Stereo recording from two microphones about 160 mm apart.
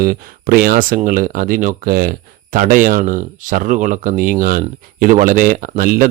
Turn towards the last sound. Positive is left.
turn(degrees=-65)  # may be behind; listen again after turning